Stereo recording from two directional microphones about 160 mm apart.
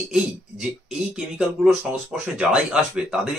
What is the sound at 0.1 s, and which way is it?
Speech, 5° right (ahead or behind).